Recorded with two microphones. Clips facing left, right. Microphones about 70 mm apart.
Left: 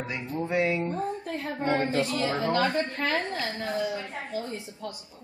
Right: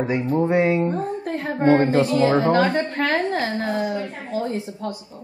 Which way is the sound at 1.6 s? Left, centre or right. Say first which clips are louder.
Right 10 dB; right.